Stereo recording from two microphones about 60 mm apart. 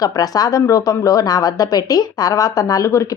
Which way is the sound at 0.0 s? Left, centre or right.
Left.